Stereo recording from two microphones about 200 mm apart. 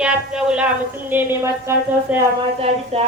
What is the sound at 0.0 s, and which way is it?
A woman's voice, 5° right (ahead or behind).